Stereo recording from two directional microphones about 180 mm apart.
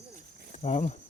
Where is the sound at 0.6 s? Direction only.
40° left (ahead or behind).